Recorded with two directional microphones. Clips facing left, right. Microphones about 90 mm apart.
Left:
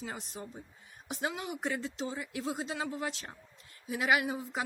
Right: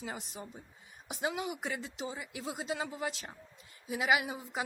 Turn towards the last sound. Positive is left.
turn(degrees=-15)  # may be behind; listen again after turning